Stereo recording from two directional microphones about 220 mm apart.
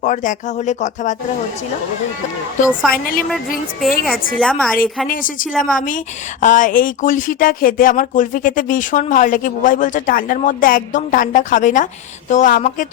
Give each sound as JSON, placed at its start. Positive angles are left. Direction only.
{"t": 0.0, "sound": "speech", "side_deg": 35}
{"t": 2.6, "sound": "speech", "side_deg": 0}
{"t": 5.0, "sound": "speech", "side_deg": 40}